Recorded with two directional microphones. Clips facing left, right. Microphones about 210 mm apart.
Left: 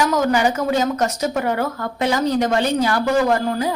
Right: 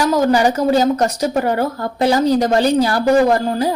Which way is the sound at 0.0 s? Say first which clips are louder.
Right 3 dB; 35° right (ahead or behind).